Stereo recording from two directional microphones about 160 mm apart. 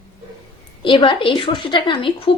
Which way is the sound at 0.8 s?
30° left (ahead or behind).